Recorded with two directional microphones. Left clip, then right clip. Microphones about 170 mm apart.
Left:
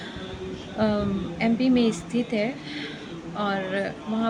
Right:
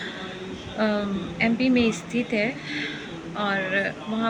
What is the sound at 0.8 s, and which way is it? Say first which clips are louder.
Speech: even; 15° left (ahead or behind).